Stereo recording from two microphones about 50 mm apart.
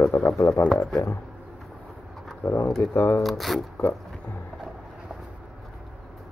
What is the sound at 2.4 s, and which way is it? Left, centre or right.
Speech, left.